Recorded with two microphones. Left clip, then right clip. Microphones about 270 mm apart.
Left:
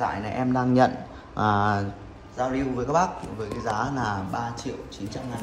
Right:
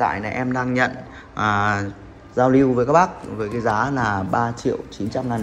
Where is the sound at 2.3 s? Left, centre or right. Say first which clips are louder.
Right 11 dB; centre.